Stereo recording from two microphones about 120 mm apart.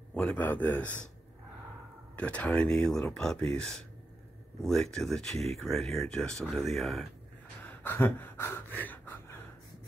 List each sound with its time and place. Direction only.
0.1 s speech: 10° left (ahead or behind)
2.1 s speech: 10° left (ahead or behind)
7.6 s a sound: 15° left (ahead or behind)